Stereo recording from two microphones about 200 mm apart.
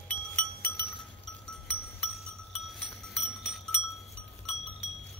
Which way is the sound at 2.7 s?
Centre (ahead or behind).